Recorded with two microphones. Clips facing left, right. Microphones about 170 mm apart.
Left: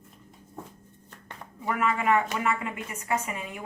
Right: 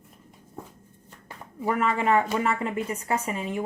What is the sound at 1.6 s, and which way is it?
Speech, 30° right (ahead or behind).